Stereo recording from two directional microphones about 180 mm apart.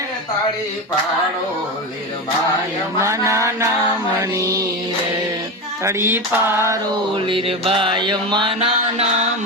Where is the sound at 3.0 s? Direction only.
15° right (ahead or behind).